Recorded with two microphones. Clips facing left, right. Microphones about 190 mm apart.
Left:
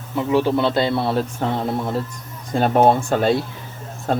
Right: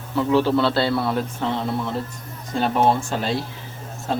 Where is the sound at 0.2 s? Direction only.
15° left (ahead or behind).